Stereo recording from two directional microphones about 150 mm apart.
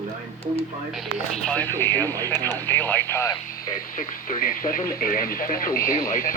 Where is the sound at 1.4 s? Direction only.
10° left (ahead or behind).